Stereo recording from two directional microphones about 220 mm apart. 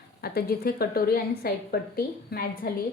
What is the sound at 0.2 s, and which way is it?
A woman's voice, 45° left (ahead or behind).